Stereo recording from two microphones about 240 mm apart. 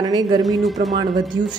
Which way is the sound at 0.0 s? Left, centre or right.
Centre.